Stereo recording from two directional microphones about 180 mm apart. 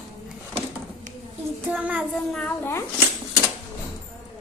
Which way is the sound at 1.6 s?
10° right (ahead or behind).